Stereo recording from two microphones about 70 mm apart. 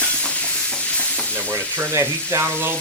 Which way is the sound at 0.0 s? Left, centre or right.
Centre.